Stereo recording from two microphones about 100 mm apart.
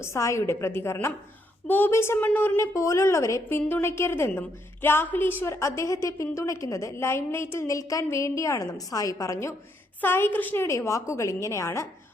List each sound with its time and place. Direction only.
0.0 s a woman's voice: 30° left (ahead or behind)
2.6 s a woman's voice: 30° left (ahead or behind)